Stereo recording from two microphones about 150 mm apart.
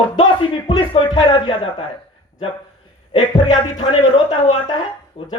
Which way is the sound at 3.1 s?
30° left (ahead or behind).